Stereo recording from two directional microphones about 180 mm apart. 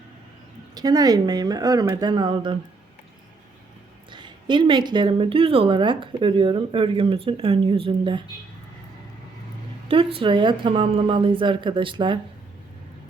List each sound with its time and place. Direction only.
0.7 s a woman's voice: 20° right (ahead or behind)
4.1 s a woman's voice: 25° right (ahead or behind)
10.2 s a woman's voice: 25° right (ahead or behind)